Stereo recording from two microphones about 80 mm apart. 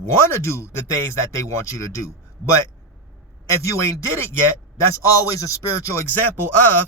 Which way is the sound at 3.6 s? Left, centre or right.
Left.